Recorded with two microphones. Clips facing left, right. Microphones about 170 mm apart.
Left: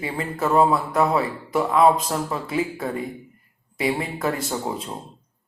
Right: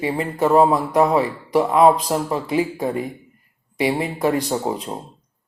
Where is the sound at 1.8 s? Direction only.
30° right (ahead or behind).